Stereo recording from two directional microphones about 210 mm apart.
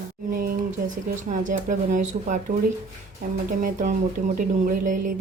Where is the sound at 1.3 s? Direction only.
40° right (ahead or behind).